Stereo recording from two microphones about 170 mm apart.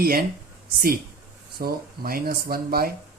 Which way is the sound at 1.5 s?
60° right (ahead or behind).